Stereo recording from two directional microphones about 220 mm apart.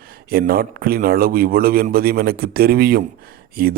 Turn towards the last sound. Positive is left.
turn(degrees=-45)  # may be behind; listen again after turning